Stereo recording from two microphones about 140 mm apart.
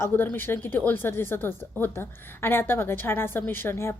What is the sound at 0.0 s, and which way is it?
Speech, 15° left (ahead or behind).